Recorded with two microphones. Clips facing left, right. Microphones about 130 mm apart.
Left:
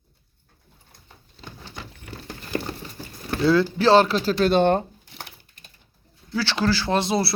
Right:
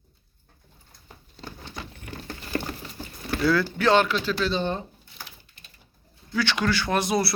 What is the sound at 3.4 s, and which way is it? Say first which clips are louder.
Speech: left 4 dB; 25° left (ahead or behind).